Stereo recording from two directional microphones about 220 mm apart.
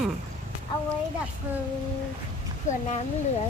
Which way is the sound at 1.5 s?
5° right (ahead or behind).